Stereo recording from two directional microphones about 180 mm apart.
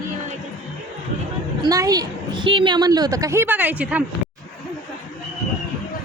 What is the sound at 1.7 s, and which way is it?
A woman's voice, 20° right (ahead or behind).